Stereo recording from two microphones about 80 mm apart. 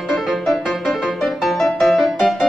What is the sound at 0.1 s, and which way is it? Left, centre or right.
Music, centre.